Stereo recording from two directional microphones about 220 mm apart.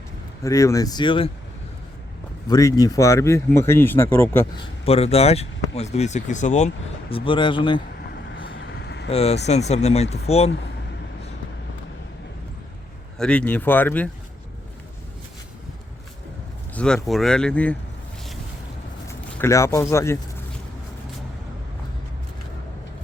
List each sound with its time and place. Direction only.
0.4 s speech: 15° left (ahead or behind)
2.5 s speech: 15° left (ahead or behind)
4.9 s speech: 30° left (ahead or behind)
7.1 s speech: 20° left (ahead or behind)
8.5 s vehicle: 50° left (ahead or behind)
9.0 s speech: 30° left (ahead or behind)
13.1 s speech: 5° left (ahead or behind)
16.7 s speech: 5° left (ahead or behind)
19.0 s speech: 15° left (ahead or behind)